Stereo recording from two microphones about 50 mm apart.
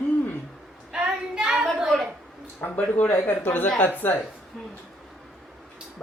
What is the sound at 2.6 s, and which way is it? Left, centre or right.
Speech, left.